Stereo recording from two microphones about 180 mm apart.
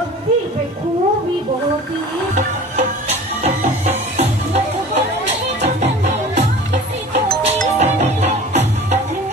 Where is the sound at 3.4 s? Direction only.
40° right (ahead or behind).